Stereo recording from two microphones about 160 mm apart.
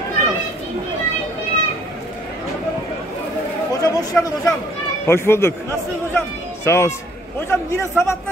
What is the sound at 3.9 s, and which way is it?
A man's voice, 20° left (ahead or behind).